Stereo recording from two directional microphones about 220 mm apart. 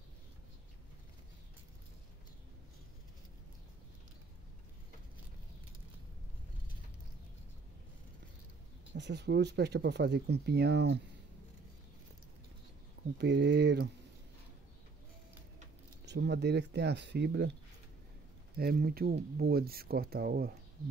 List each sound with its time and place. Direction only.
8.9 s speech: 50° right (ahead or behind)
13.2 s speech: 50° right (ahead or behind)
16.1 s speech: 50° right (ahead or behind)
18.6 s speech: 45° right (ahead or behind)